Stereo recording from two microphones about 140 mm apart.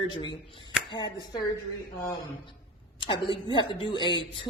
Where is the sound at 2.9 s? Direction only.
35° left (ahead or behind).